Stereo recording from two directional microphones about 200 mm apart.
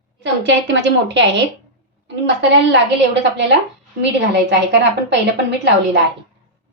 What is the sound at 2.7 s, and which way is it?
Speech, 60° right (ahead or behind).